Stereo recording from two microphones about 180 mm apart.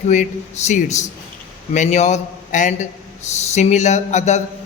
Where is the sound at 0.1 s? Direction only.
40° left (ahead or behind).